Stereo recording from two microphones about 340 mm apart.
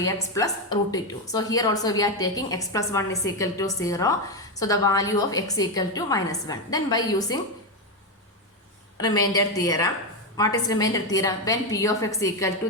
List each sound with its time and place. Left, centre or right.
0.0 s a woman's voice: centre
9.0 s a woman's voice: centre